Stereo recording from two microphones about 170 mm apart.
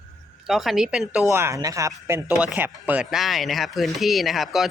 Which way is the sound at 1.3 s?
15° right (ahead or behind).